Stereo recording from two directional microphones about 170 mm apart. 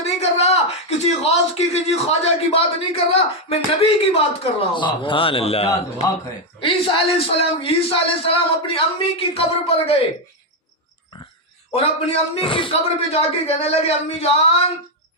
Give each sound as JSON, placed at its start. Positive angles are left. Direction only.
{"t": 0.0, "sound": "a man's voice", "side_deg": 40}
{"t": 11.7, "sound": "a man's voice", "side_deg": 35}